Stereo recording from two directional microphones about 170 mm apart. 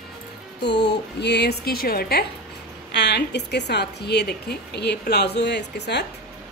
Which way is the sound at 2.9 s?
85° left.